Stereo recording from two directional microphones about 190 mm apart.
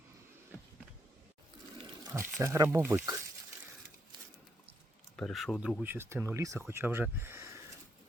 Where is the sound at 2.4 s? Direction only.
15° right (ahead or behind).